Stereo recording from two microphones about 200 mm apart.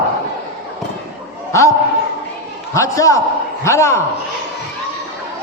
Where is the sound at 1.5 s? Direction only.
15° left (ahead or behind).